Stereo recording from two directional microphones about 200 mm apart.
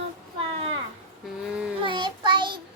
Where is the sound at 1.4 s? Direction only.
5° right (ahead or behind).